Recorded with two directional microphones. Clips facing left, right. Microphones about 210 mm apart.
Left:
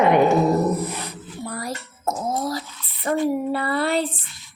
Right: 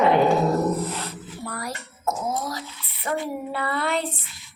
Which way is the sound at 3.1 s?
40° left (ahead or behind).